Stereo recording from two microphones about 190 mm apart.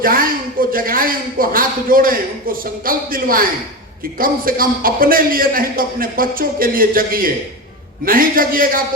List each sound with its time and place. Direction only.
0.0 s a man's voice: 50° right (ahead or behind)